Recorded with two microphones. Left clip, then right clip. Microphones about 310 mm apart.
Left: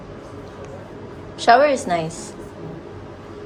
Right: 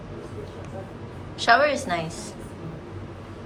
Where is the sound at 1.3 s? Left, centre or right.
Centre.